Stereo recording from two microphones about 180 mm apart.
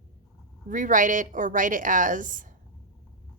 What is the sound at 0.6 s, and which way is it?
A woman's voice, 45° right (ahead or behind).